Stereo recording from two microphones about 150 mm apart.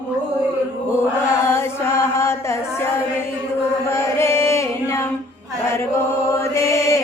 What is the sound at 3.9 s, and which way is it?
Chant, 15° left (ahead or behind).